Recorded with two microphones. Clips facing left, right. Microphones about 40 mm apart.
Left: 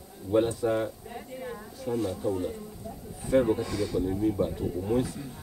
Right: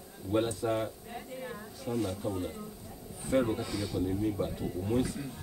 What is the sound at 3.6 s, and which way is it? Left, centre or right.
Speech, centre.